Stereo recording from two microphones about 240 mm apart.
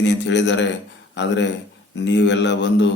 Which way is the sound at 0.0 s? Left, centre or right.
Left.